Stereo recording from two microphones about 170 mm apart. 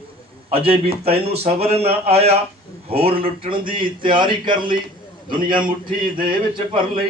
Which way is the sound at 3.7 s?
30° right (ahead or behind).